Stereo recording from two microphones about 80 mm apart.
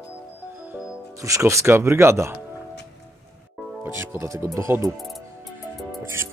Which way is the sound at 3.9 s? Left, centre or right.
Right.